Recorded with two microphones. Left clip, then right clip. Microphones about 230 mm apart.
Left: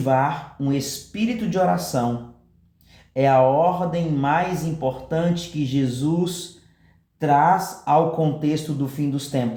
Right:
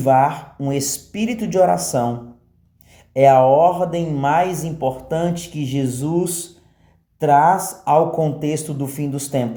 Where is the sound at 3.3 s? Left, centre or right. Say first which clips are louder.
Right 4 dB; right.